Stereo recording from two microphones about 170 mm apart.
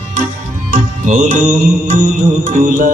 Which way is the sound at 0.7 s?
50° right (ahead or behind).